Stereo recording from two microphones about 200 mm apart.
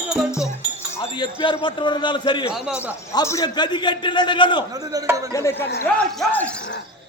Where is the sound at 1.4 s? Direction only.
25° left (ahead or behind).